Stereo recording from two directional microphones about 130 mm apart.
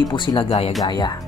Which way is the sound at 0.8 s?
35° left (ahead or behind).